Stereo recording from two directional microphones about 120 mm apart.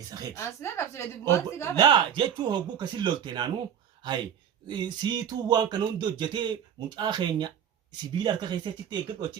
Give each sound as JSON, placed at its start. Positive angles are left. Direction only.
{"t": 0.3, "sound": "speech", "side_deg": 20}
{"t": 1.7, "sound": "speech", "side_deg": -40}